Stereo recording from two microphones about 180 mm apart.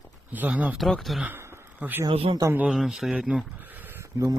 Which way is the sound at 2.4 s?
10° right (ahead or behind).